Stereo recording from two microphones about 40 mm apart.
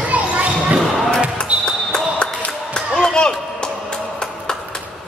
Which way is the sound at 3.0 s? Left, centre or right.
Centre.